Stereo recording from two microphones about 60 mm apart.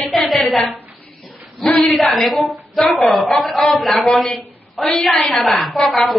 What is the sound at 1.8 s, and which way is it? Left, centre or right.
A woman's voice, centre.